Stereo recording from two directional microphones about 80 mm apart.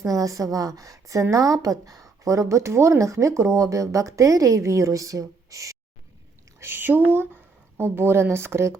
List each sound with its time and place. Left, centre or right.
0.1 s a woman's voice: right
6.6 s speech: right